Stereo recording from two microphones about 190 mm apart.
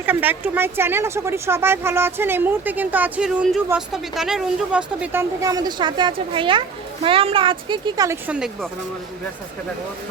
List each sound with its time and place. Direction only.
0.0 s speech: 10° right (ahead or behind)
5.4 s a woman's voice: 20° right (ahead or behind)
8.3 s a woman's voice: 5° right (ahead or behind)